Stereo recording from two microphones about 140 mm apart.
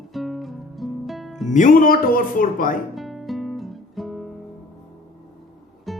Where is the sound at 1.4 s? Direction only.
65° left (ahead or behind); by 2.7 s 85° left.